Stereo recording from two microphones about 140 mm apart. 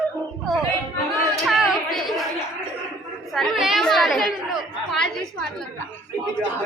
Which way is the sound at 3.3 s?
Centre (ahead or behind).